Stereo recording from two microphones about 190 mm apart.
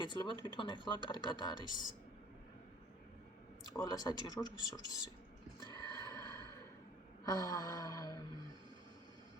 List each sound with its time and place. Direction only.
0.0 s speech: 25° left (ahead or behind)
3.7 s speech: 20° left (ahead or behind)
5.6 s a sound: 15° left (ahead or behind)
7.3 s speech: 20° left (ahead or behind)